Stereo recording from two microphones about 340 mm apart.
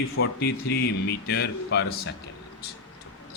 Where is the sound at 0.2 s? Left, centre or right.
Left.